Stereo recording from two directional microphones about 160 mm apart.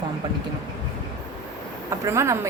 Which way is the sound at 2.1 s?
20° right (ahead or behind).